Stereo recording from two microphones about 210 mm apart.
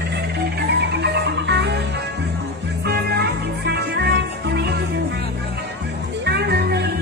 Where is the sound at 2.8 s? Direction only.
50° right (ahead or behind).